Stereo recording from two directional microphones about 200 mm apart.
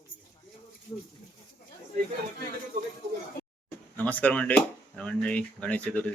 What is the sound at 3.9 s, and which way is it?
Speech, 10° left (ahead or behind).